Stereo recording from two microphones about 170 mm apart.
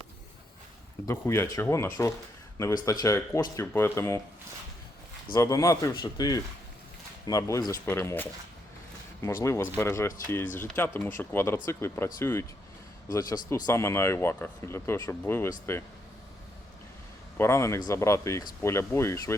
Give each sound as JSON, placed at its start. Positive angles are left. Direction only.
{"t": 1.0, "sound": "speech", "side_deg": 15}
{"t": 5.3, "sound": "speech", "side_deg": 20}
{"t": 13.7, "sound": "speech", "side_deg": 15}
{"t": 17.3, "sound": "speech", "side_deg": 15}